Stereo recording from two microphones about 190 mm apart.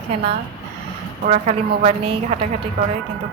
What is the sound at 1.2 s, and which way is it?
A woman's voice, 40° right (ahead or behind).